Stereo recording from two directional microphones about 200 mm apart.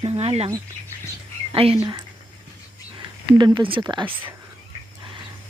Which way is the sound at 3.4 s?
20° right (ahead or behind).